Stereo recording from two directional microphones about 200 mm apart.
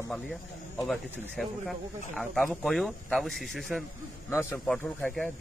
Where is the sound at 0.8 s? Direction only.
Centre (ahead or behind).